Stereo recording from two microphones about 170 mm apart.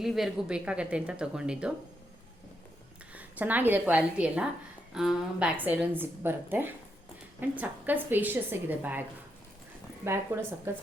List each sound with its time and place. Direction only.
0.0 s speech: centre (ahead or behind)
3.2 s a woman's voice: 10° right (ahead or behind)
10.3 s a woman's voice: 15° right (ahead or behind)